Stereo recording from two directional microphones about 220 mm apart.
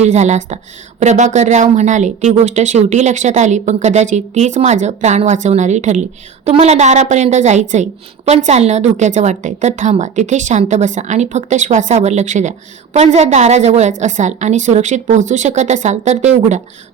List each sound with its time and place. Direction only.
0.0 s speech: 30° right (ahead or behind)